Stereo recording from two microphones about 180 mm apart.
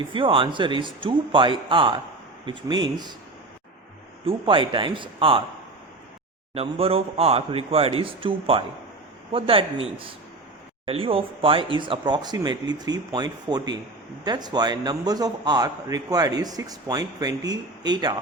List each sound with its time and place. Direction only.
0.1 s a man's voice: 30° right (ahead or behind)
4.3 s a man's voice: 30° right (ahead or behind)
6.5 s a man's voice: 35° right (ahead or behind)